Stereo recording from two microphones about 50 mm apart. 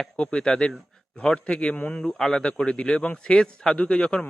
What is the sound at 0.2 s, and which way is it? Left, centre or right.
A man's voice, centre.